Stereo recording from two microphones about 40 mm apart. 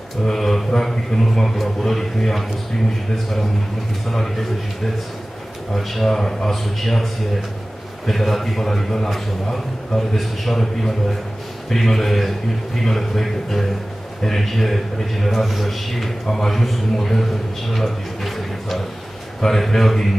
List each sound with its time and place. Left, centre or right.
0.2 s mantra: centre
0.7 s a man's voice: centre
4.1 s a man's voice: centre
5.8 s a man's voice: centre
8.1 s a man's voice: centre